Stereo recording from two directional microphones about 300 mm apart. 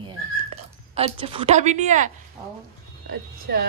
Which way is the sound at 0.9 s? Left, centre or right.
Centre.